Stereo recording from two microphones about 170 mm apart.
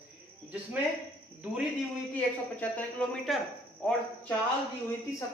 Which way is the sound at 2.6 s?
10° left (ahead or behind).